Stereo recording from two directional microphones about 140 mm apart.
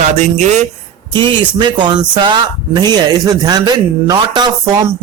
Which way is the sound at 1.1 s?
35° right (ahead or behind).